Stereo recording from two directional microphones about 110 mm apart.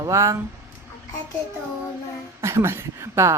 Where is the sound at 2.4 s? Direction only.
25° right (ahead or behind).